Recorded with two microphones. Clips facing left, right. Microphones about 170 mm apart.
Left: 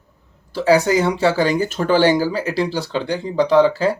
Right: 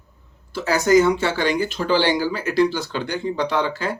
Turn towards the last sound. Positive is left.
turn(degrees=35)  # may be behind; listen again after turning